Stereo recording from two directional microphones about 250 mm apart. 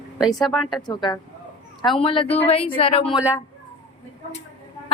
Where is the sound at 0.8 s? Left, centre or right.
Centre.